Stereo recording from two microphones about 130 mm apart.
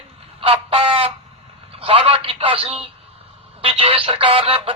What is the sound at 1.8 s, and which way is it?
A man's voice, 45° right (ahead or behind).